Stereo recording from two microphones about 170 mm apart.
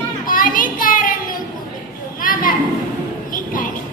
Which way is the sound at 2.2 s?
55° left (ahead or behind).